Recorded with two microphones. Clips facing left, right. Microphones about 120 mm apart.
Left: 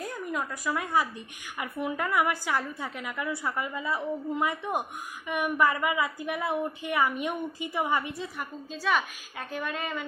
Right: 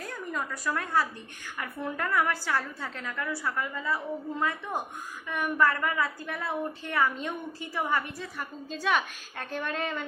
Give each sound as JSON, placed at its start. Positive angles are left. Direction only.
{"t": 0.1, "sound": "a woman's voice", "side_deg": 10}
{"t": 8.7, "sound": "a woman's voice", "side_deg": 5}